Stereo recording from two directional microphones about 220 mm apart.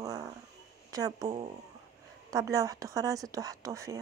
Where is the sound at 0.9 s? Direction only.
15° right (ahead or behind).